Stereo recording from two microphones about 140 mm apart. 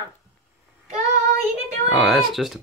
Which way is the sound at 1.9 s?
Centre (ahead or behind).